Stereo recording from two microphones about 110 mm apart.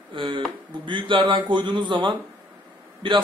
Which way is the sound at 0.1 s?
50° right (ahead or behind).